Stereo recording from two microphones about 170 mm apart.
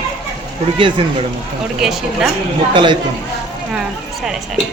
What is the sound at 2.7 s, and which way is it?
Speech, 25° right (ahead or behind).